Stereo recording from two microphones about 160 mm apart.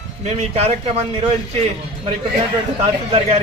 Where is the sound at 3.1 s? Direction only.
40° right (ahead or behind).